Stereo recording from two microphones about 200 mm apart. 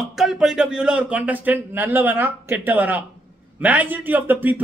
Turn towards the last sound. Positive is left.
turn(degrees=-10)  # may be behind; listen again after turning